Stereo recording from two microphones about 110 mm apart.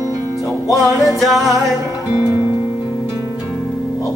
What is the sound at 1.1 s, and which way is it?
Music, centre (ahead or behind).